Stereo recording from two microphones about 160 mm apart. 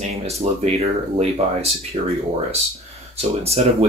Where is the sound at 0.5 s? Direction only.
40° right (ahead or behind).